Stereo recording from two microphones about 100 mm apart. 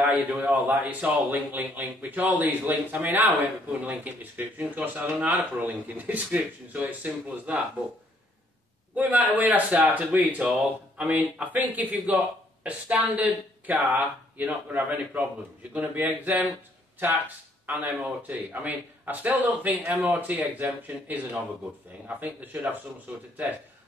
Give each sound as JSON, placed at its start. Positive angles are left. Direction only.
{"t": 0.0, "sound": "speech", "side_deg": -15}
{"t": 8.9, "sound": "speech", "side_deg": -15}
{"t": 17.6, "sound": "speech", "side_deg": -15}